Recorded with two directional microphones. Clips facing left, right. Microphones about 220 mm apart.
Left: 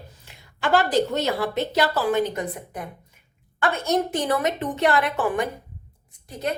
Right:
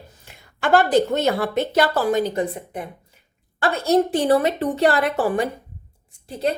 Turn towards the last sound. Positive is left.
turn(degrees=-30)  # may be behind; listen again after turning